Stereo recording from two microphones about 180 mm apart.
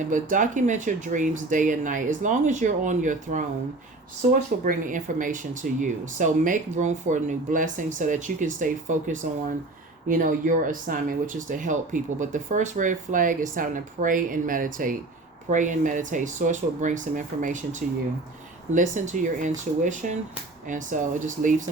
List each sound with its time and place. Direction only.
0.1 s speech: 45° right (ahead or behind)